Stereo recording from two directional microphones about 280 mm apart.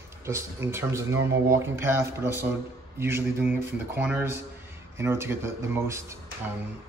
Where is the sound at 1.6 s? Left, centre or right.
Centre.